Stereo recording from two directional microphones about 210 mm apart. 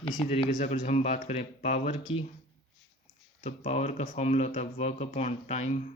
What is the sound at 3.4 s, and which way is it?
Speech, 30° left (ahead or behind).